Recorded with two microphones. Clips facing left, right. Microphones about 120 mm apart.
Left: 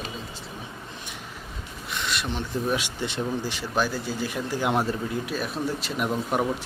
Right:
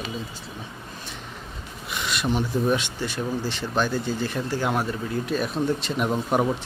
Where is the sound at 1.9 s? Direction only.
5° right (ahead or behind).